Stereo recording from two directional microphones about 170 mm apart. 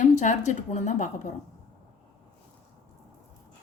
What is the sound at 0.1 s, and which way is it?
Speech, 45° left (ahead or behind).